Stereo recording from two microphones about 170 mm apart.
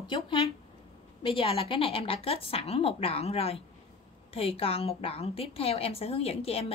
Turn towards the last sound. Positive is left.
turn(degrees=35)  # may be behind; listen again after turning